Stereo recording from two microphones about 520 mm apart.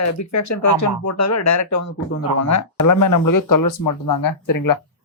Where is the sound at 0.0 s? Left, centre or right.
Left.